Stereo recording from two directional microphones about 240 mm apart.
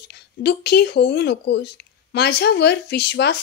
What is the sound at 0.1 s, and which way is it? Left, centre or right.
Speech, left.